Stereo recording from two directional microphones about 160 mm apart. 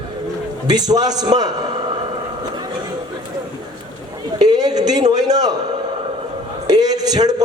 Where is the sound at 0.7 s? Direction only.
25° right (ahead or behind).